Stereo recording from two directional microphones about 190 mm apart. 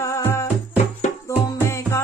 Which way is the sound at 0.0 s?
15° left (ahead or behind).